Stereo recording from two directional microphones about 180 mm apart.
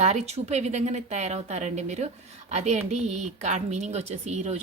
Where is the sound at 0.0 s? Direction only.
40° right (ahead or behind).